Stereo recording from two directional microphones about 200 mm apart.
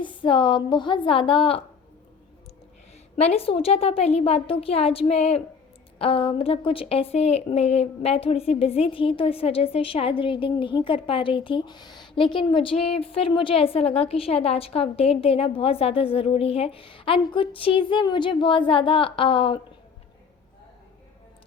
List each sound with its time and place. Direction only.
0.0 s speech: 25° left (ahead or behind)
3.2 s speech: 30° left (ahead or behind)